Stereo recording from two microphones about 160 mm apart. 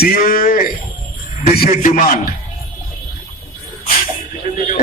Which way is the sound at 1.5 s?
60° left (ahead or behind).